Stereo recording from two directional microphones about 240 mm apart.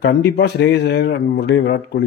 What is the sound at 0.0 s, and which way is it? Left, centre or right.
Speech, left.